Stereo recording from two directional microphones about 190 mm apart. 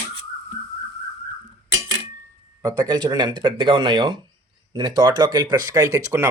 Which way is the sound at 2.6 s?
20° right (ahead or behind).